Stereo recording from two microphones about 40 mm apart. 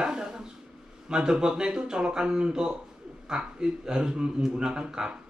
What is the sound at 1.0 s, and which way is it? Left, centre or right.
Speech, centre.